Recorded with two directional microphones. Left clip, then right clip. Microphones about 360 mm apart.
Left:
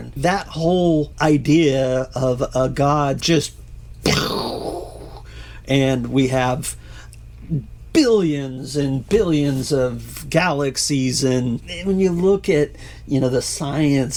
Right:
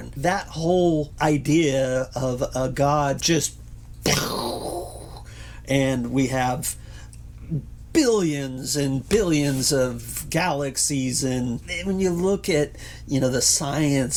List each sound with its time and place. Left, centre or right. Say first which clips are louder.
0.2 s speech: left 4 dB; left
4.0 s groan: left 4 dB; left
5.6 s speech: left 4 dB; left
7.9 s speech: left 4 dB; left
10.2 s speech: left 5 dB; left
11.6 s speech: left 5 dB; left